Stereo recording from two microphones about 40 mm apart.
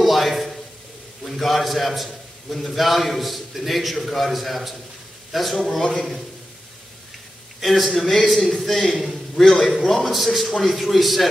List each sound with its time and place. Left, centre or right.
0.0 s a sound: centre
1.2 s a man's voice: centre
7.6 s a man's voice: centre
10.1 s a man's voice: centre